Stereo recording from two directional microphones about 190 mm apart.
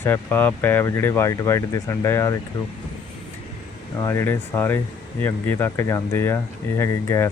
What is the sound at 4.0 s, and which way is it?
Speech, 10° left (ahead or behind).